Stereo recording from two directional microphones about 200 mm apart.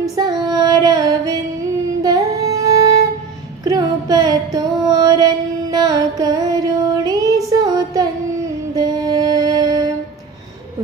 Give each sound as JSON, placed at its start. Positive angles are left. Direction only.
{"t": 0.1, "sound": "female singing", "side_deg": -20}
{"t": 0.8, "sound": "music", "side_deg": -20}
{"t": 3.6, "sound": "a sound", "side_deg": -20}
{"t": 4.6, "sound": "music", "side_deg": -20}